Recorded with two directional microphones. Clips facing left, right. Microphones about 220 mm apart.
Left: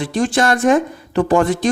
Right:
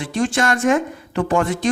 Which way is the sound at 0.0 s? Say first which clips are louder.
Left 3 dB; 35° left (ahead or behind).